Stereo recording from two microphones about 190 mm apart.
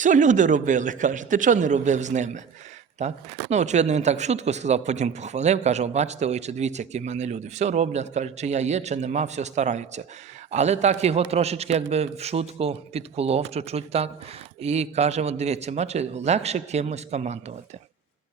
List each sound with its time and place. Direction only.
0.0 s speech: 40° right (ahead or behind)
3.5 s speech: 35° right (ahead or behind)